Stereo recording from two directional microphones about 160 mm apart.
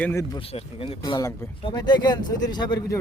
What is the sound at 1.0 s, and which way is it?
Speech, 25° left (ahead or behind).